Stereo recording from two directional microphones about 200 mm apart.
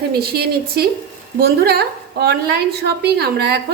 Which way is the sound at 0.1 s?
50° right (ahead or behind).